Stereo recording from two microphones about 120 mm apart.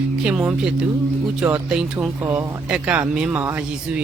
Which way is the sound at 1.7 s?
5° right (ahead or behind).